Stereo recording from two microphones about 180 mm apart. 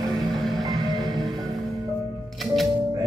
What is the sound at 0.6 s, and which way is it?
Music, 20° right (ahead or behind).